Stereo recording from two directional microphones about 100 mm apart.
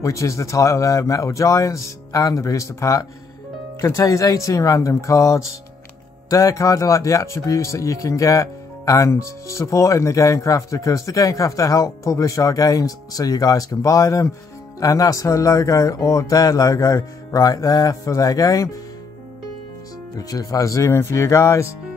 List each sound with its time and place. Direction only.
0.0 s speech: 30° left (ahead or behind)
20.2 s speech: 35° left (ahead or behind)